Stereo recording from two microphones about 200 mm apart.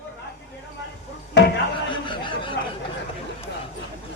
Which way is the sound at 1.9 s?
25° left (ahead or behind).